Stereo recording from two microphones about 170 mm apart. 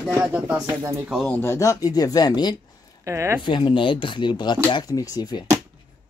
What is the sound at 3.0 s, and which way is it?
Speech, 15° right (ahead or behind).